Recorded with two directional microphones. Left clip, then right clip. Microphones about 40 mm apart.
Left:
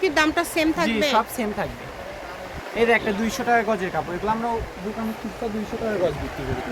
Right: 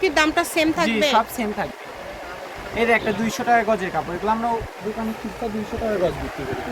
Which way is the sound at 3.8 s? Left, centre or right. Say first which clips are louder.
Right 1 dB; left.